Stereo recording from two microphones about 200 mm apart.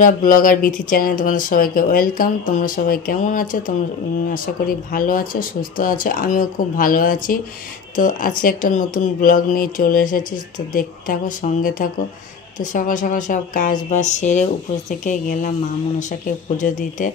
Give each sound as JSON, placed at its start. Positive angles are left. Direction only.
{"t": 0.0, "sound": "speech", "side_deg": 40}